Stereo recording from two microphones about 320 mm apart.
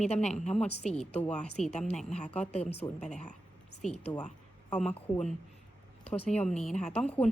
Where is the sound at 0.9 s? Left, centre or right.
Centre.